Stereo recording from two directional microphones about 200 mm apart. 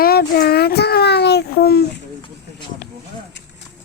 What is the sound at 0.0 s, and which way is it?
Child singing, 50° left (ahead or behind).